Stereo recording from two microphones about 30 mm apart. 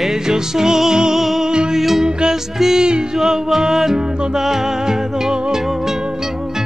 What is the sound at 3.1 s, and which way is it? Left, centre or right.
Music, centre.